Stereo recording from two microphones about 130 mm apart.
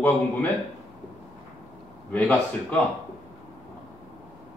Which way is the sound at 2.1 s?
10° left (ahead or behind).